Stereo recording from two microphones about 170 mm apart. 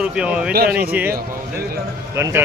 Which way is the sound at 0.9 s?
10° right (ahead or behind).